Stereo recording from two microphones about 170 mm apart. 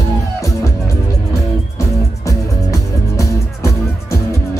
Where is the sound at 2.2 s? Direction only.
20° left (ahead or behind).